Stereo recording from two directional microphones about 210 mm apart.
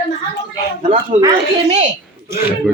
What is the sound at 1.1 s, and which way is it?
Speech, 30° right (ahead or behind).